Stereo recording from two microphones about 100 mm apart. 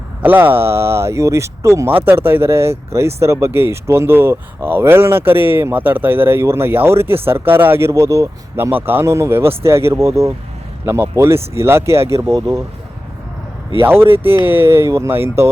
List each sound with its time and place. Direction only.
0.2 s speech: 20° right (ahead or behind)
8.5 s speech: 20° right (ahead or behind)
13.8 s speech: 20° right (ahead or behind)